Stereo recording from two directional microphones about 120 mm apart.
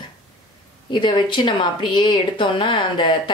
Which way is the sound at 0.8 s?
40° left (ahead or behind).